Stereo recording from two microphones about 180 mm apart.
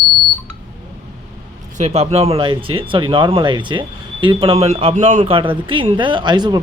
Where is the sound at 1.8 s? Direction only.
35° right (ahead or behind).